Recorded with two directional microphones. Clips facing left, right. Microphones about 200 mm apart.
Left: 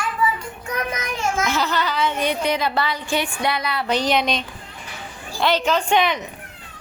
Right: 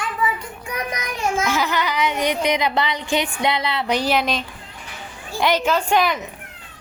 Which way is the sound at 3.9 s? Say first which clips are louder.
Left 1 dB; 5° right (ahead or behind).